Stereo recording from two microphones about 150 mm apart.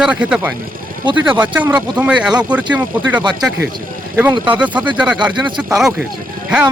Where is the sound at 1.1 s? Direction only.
30° right (ahead or behind).